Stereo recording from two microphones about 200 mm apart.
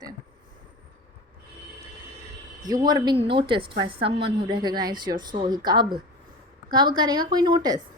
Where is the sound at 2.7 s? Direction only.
20° right (ahead or behind).